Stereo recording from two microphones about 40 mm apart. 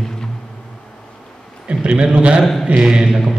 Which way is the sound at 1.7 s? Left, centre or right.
Right.